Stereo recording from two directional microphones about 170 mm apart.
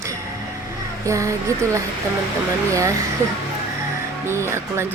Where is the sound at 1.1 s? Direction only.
20° right (ahead or behind).